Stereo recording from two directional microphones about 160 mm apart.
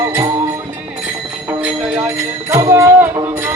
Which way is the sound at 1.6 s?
15° right (ahead or behind).